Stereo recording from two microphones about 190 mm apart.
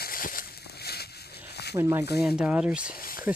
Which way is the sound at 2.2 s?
5° right (ahead or behind).